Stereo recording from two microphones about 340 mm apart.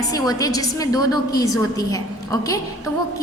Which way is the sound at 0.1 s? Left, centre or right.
Centre.